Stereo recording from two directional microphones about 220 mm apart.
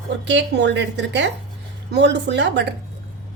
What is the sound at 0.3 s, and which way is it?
Speech, 50° right (ahead or behind).